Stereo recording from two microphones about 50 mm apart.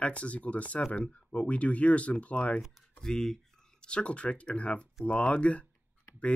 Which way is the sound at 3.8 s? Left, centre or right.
Left.